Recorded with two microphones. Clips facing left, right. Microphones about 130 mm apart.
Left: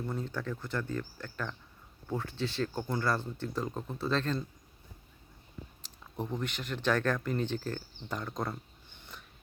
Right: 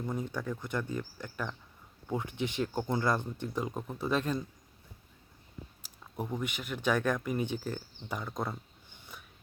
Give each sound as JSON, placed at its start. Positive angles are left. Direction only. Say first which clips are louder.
{"t": 0.0, "sound": "speech", "louder": "right 1 dB", "side_deg": -15}
{"t": 5.8, "sound": "speech", "louder": "even", "side_deg": -10}